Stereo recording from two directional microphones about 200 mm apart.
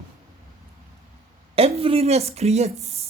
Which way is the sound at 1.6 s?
30° right (ahead or behind).